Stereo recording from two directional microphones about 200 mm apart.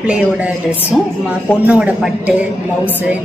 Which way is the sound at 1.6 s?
5° right (ahead or behind).